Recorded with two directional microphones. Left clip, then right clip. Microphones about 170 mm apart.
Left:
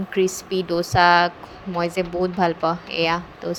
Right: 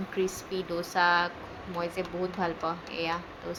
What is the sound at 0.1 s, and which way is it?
A woman's voice, 45° left (ahead or behind).